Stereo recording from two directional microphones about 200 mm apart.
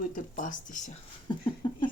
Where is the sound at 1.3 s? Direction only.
25° left (ahead or behind).